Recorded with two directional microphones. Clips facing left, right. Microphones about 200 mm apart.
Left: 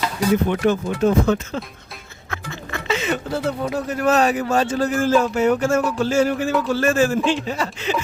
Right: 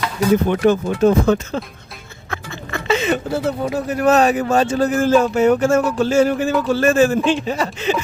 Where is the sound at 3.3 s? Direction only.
5° right (ahead or behind).